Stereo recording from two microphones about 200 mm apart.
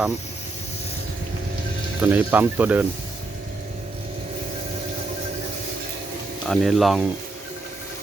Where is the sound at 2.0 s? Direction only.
10° right (ahead or behind).